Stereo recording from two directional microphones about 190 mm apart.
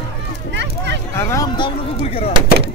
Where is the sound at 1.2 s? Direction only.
15° left (ahead or behind); by 2.3 s 30° left (ahead or behind).